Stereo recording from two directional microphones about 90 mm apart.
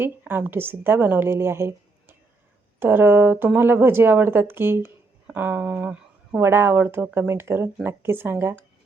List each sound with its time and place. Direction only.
0.0 s speech: 25° right (ahead or behind)
6.4 s speech: 30° right (ahead or behind)